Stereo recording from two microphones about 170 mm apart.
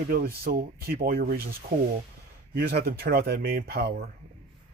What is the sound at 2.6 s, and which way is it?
Speech, 70° right (ahead or behind).